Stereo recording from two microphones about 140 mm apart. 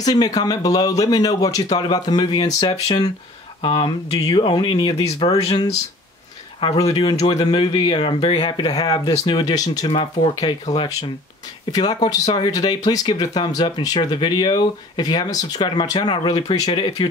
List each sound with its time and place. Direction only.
0.0 s speech: 30° left (ahead or behind)
5.3 s speech: 30° left (ahead or behind)
6.8 s speech: 30° left (ahead or behind)
11.7 s speech: 30° left (ahead or behind)